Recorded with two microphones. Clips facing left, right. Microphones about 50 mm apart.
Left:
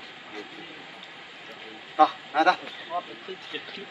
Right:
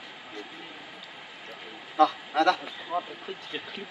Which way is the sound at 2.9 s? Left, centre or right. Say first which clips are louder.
Right 1 dB; centre.